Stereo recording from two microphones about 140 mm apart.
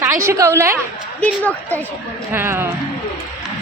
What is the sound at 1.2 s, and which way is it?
Speech, 10° left (ahead or behind).